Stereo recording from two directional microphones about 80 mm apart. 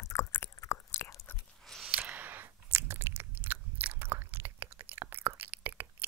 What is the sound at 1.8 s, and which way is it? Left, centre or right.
Chewing, centre.